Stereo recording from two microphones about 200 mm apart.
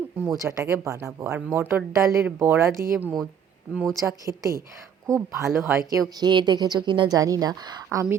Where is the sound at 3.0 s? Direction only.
10° left (ahead or behind).